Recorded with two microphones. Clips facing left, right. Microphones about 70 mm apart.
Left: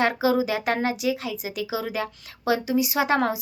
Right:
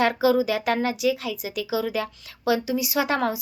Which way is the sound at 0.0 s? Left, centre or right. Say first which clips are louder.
Right 2 dB; left.